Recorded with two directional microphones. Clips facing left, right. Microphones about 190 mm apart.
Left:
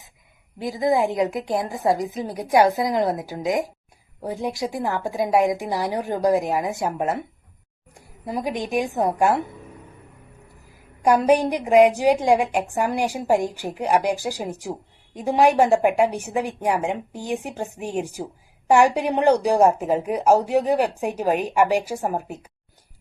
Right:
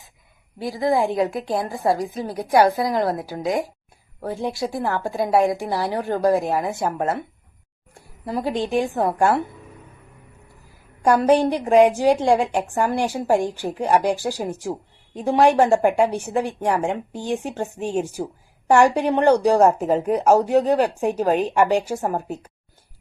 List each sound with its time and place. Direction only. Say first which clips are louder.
0.6 s a woman's voice: even; 20° left (ahead or behind)
8.2 s speech: right 2 dB; 15° left (ahead or behind)
11.0 s speech: right 1 dB; 10° left (ahead or behind)